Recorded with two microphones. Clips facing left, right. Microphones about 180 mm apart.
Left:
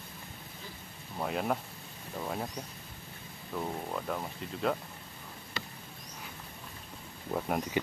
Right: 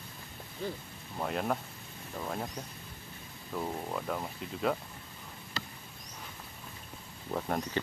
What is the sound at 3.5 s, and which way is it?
Speech, centre (ahead or behind).